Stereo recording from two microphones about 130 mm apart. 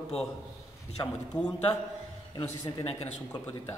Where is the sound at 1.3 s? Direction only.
5° left (ahead or behind).